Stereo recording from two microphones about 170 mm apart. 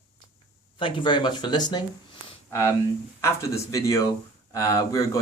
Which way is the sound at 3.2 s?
15° left (ahead or behind).